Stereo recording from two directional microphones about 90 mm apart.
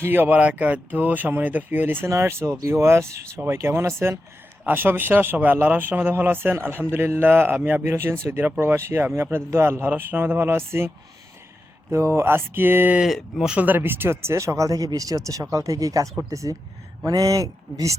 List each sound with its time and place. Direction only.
0.0 s speech: 20° right (ahead or behind)
13.0 s speech: centre (ahead or behind)
13.5 s speech: 20° right (ahead or behind); by 17.9 s 40° right (ahead or behind)